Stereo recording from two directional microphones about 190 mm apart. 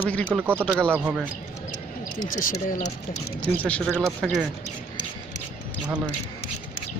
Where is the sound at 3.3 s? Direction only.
5° left (ahead or behind).